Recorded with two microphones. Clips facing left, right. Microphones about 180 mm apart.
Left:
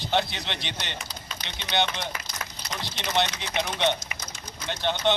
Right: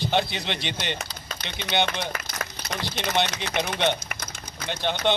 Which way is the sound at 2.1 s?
60° right (ahead or behind).